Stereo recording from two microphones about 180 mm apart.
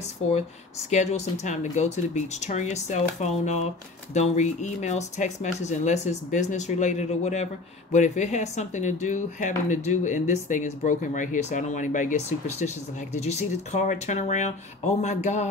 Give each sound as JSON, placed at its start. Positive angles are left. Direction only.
{"t": 0.8, "sound": "speech", "side_deg": 40}